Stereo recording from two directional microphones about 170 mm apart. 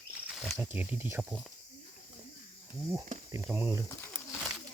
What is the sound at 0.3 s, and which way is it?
Cricket, centre (ahead or behind).